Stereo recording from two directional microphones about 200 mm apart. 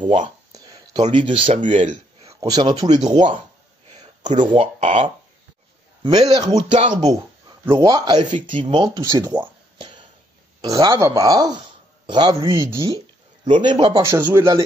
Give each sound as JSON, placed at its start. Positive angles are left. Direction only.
{"t": 0.0, "sound": "speech", "side_deg": -35}
{"t": 0.5, "sound": "a sound", "side_deg": -20}
{"t": 1.0, "sound": "speech", "side_deg": -25}
{"t": 2.4, "sound": "a man's voice", "side_deg": -20}
{"t": 4.0, "sound": "a sound", "side_deg": -35}
{"t": 4.4, "sound": "a man's voice", "side_deg": -25}
{"t": 6.0, "sound": "a man's voice", "side_deg": -20}
{"t": 6.7, "sound": "speech", "side_deg": -35}
{"t": 7.0, "sound": "a man's voice", "side_deg": -20}
{"t": 10.6, "sound": "a man's voice", "side_deg": -20}